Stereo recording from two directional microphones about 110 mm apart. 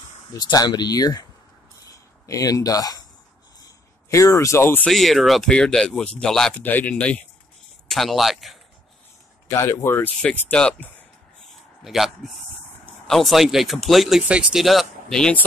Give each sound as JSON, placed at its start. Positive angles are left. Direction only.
{"t": 0.3, "sound": "speech", "side_deg": 35}
{"t": 3.6, "sound": "a sound", "side_deg": 30}
{"t": 4.8, "sound": "speech", "side_deg": 0}
{"t": 6.6, "sound": "speech", "side_deg": 15}
{"t": 7.9, "sound": "speech", "side_deg": 0}
{"t": 9.5, "sound": "speech", "side_deg": 25}
{"t": 10.2, "sound": "speech", "side_deg": 10}
{"t": 11.8, "sound": "speech", "side_deg": 0}